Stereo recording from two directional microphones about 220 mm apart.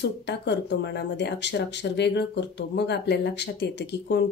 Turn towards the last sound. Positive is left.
turn(degrees=50)  # may be behind; listen again after turning